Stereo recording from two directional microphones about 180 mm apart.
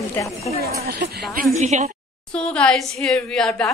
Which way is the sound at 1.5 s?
40° right (ahead or behind).